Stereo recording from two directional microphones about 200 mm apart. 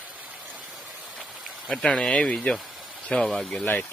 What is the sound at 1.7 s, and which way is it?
Speech, 5° left (ahead or behind).